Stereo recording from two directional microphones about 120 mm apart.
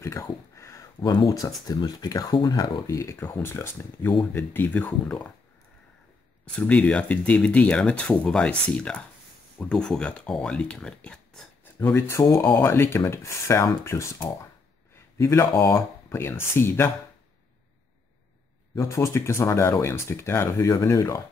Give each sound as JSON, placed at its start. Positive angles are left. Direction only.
{"t": 0.0, "sound": "a sound", "side_deg": 25}
{"t": 1.7, "sound": "speech", "side_deg": 35}
{"t": 6.4, "sound": "speech", "side_deg": 10}
{"t": 11.6, "sound": "speech", "side_deg": 20}
{"t": 18.8, "sound": "speech", "side_deg": 25}